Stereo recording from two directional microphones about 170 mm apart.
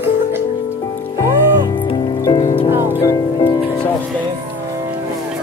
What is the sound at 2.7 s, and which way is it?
Music, 15° right (ahead or behind).